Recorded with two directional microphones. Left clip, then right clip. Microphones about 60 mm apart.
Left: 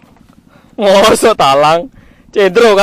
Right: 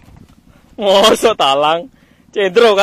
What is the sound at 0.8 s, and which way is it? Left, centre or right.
Speech, left.